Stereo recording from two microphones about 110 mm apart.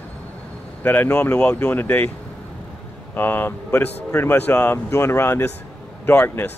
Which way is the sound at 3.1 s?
20° left (ahead or behind).